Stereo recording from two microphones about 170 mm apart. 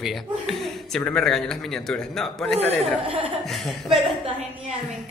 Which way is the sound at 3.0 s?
30° right (ahead or behind).